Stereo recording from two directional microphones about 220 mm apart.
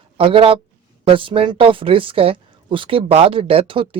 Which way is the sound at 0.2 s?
25° right (ahead or behind).